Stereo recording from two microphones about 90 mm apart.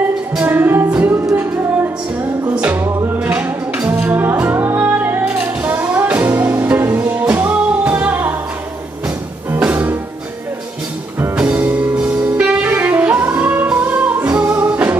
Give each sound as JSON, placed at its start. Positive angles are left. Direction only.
{"t": 0.4, "sound": "music", "side_deg": -20}
{"t": 9.5, "sound": "music", "side_deg": -15}
{"t": 11.3, "sound": "saxophone", "side_deg": -15}